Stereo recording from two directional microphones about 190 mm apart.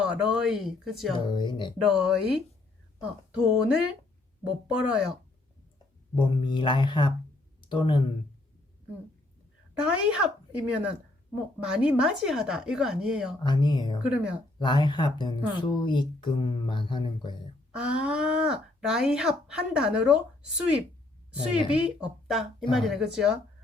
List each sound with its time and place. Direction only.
0.0 s speech: 5° right (ahead or behind)
1.1 s a woman's voice: 25° left (ahead or behind)
1.8 s speech: 5° right (ahead or behind)
6.1 s a woman's voice: 25° left (ahead or behind)
9.7 s speech: 5° right (ahead or behind)
13.4 s a woman's voice: 20° left (ahead or behind)
14.0 s speech: 5° right (ahead or behind)
14.6 s a woman's voice: 25° left (ahead or behind)
17.7 s speech: 5° right (ahead or behind)
21.7 s speech: 5° right (ahead or behind)